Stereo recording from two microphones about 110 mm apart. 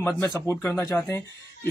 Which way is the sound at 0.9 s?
15° left (ahead or behind).